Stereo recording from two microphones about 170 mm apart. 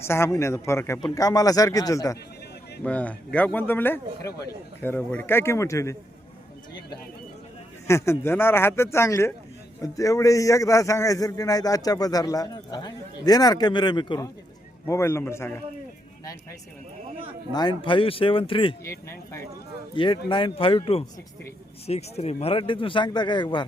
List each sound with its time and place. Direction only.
0.0 s speech: 15° left (ahead or behind)
2.8 s speech: 10° left (ahead or behind)
4.3 s speech: 70° left (ahead or behind)
4.8 s speech: 10° left (ahead or behind)
7.9 s speech: 15° left (ahead or behind)
14.8 s speech: 15° left (ahead or behind)
17.5 s speech: 25° left (ahead or behind)
18.9 s speech: 15° left (ahead or behind)
20.0 s speech: 30° left (ahead or behind)